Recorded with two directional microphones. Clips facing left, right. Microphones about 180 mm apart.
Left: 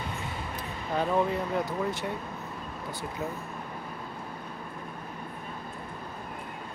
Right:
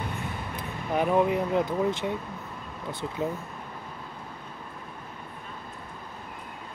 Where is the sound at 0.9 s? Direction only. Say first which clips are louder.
Right 3 dB; 15° right (ahead or behind).